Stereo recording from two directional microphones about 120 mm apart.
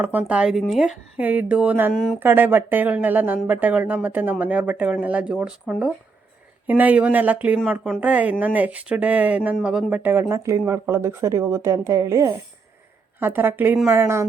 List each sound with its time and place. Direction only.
0.0 s speech: 15° right (ahead or behind)
1.9 s speech: 5° left (ahead or behind)
2.1 s a woman's voice: 15° right (ahead or behind)